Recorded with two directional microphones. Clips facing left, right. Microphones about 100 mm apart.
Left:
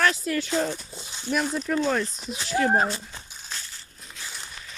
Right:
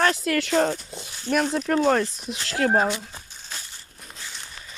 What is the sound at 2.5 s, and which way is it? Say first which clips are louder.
Speech: right 1 dB; 80° right.